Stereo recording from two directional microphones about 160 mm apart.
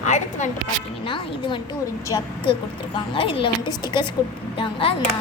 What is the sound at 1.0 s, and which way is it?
A woman's voice, 30° left (ahead or behind).